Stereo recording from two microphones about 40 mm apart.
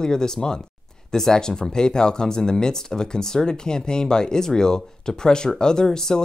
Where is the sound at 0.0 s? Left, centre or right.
Centre.